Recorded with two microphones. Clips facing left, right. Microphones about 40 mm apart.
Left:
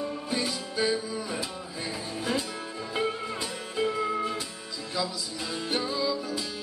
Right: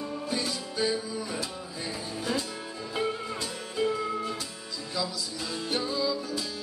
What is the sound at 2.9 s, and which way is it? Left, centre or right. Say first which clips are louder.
Music: left 1 dB; centre.